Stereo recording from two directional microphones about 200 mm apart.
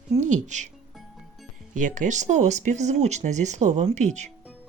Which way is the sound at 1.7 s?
40° right (ahead or behind).